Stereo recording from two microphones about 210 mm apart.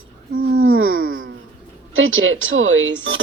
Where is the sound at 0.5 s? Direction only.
75° right (ahead or behind).